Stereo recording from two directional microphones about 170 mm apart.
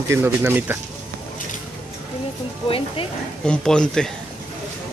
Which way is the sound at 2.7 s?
30° left (ahead or behind).